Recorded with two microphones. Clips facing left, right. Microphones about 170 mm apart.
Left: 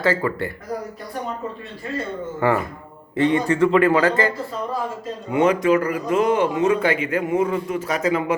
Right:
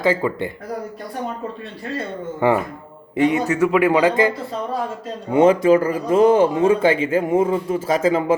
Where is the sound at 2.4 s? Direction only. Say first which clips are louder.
Right 3 dB; 15° right (ahead or behind).